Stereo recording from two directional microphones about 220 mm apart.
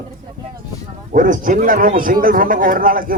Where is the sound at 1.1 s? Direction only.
35° right (ahead or behind).